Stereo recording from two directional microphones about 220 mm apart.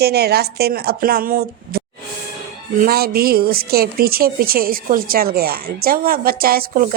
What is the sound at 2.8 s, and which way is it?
A woman's voice, 45° right (ahead or behind).